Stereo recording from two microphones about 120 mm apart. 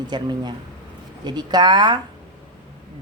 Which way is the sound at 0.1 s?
35° right (ahead or behind).